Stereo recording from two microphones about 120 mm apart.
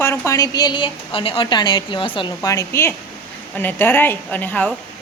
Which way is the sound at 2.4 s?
25° left (ahead or behind).